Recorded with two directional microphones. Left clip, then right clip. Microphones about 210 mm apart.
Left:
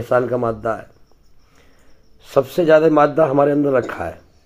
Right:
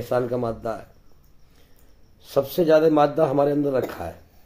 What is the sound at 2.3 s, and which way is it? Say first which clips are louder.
Speech: left 5 dB; 10° left (ahead or behind).